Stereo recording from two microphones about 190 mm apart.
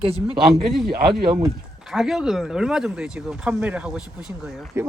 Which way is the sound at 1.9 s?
Centre (ahead or behind).